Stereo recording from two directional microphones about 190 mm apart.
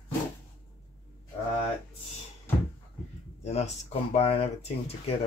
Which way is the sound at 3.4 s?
35° left (ahead or behind).